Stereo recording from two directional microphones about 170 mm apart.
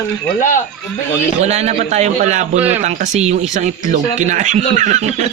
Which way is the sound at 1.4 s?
40° right (ahead or behind).